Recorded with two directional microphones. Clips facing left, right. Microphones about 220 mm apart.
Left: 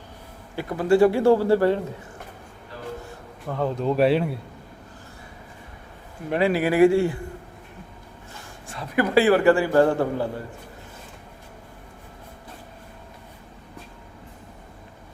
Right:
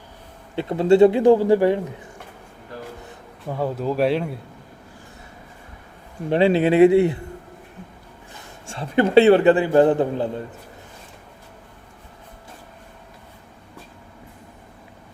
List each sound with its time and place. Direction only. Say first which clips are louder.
0.5 s a man's voice: right 4 dB; 25° right (ahead or behind)
3.1 s speech: right 1 dB; 10° right (ahead or behind)
6.3 s a man's voice: right 4 dB; 25° right (ahead or behind)
8.6 s a man's voice: right 4 dB; 25° right (ahead or behind)